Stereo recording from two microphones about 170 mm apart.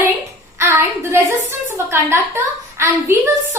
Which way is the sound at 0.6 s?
15° right (ahead or behind).